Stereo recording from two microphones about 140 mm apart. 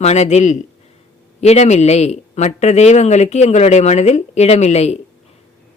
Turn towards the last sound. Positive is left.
turn(degrees=50)  # may be behind; listen again after turning